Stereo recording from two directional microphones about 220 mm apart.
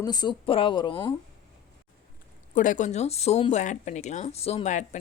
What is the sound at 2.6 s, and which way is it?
Speech, 35° left (ahead or behind).